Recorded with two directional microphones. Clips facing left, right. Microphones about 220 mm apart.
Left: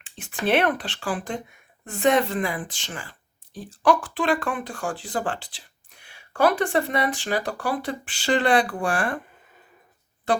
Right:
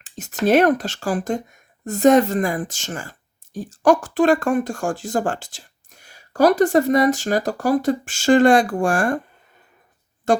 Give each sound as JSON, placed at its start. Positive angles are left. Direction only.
{"t": 0.0, "sound": "speech", "side_deg": -40}
{"t": 10.3, "sound": "speech", "side_deg": -45}